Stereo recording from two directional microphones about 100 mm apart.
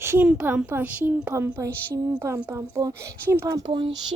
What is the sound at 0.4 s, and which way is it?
Speech, 20° right (ahead or behind).